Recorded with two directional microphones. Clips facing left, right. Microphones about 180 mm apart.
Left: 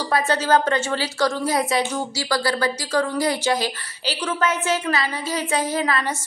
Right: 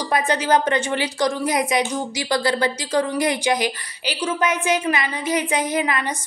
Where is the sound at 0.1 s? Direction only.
15° right (ahead or behind).